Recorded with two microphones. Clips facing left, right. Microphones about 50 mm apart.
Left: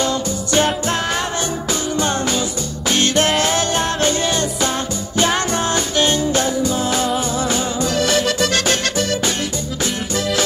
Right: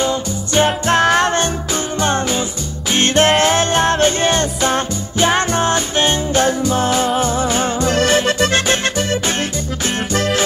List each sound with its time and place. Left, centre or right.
0.0 s music: right
0.8 s music: right
2.0 s music: right
5.2 s music: right
6.4 s music: right
6.9 s music: right